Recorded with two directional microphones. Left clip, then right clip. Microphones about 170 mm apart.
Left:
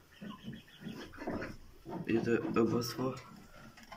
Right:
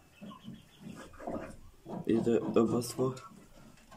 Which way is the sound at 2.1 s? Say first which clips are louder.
Right 3 dB; 15° left (ahead or behind).